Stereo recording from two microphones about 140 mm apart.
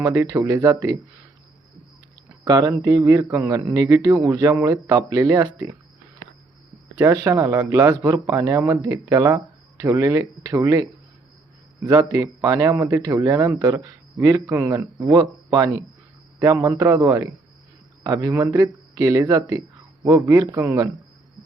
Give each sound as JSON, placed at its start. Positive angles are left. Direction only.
{"t": 0.0, "sound": "speech", "side_deg": -25}
{"t": 2.4, "sound": "speech", "side_deg": -25}
{"t": 7.3, "sound": "speech", "side_deg": -25}
{"t": 11.9, "sound": "speech", "side_deg": -25}